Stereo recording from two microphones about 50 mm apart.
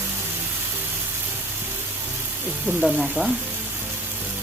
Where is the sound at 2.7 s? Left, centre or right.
Right.